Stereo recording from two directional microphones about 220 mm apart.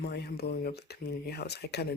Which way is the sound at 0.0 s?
50° left (ahead or behind).